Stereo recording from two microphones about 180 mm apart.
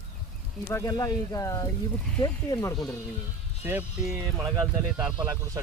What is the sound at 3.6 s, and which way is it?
Speech, 10° right (ahead or behind).